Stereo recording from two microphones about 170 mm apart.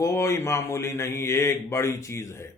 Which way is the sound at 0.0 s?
15° left (ahead or behind).